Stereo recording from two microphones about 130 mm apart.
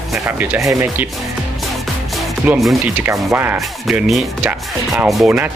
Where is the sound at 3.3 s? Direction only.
15° right (ahead or behind).